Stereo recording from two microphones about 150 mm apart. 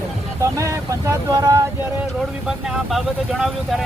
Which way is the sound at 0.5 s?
20° right (ahead or behind).